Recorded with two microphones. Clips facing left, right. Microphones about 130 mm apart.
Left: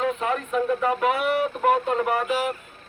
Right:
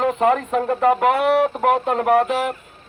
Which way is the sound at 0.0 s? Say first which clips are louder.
Right 7 dB; 65° right (ahead or behind).